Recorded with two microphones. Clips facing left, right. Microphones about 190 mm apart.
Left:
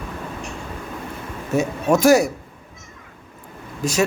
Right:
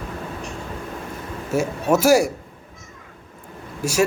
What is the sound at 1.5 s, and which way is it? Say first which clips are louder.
Speech: left 1 dB; 5° right (ahead or behind).